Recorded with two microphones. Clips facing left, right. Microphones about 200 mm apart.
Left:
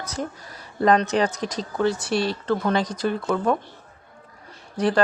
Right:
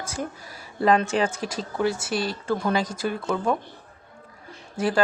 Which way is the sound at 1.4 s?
5° right (ahead or behind).